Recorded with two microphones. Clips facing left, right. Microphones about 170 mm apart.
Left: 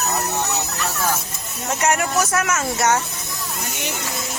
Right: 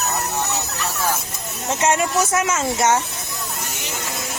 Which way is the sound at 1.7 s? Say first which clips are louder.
Right 1 dB; 25° right (ahead or behind).